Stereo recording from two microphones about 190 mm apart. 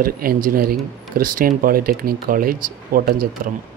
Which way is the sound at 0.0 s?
50° right (ahead or behind).